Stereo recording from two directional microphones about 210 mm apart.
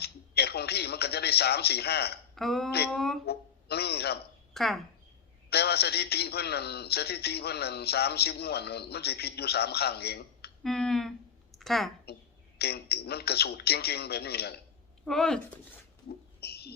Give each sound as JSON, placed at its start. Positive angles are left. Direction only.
{"t": 0.0, "sound": "speech", "side_deg": 50}
{"t": 2.3, "sound": "speech", "side_deg": 0}
{"t": 3.2, "sound": "a man's voice", "side_deg": 50}
{"t": 4.5, "sound": "speech", "side_deg": 0}
{"t": 5.5, "sound": "a man's voice", "side_deg": 50}
{"t": 10.6, "sound": "speech", "side_deg": 0}
{"t": 11.5, "sound": "a sound", "side_deg": 0}
{"t": 12.1, "sound": "a woman's voice", "side_deg": 50}
{"t": 15.0, "sound": "speech", "side_deg": 0}
{"t": 16.4, "sound": "a sound", "side_deg": 50}